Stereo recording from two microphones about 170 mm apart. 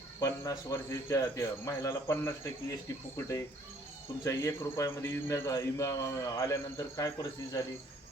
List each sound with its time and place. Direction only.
0.2 s a man's voice: 20° left (ahead or behind)